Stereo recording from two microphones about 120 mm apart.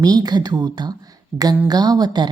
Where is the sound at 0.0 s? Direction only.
35° right (ahead or behind).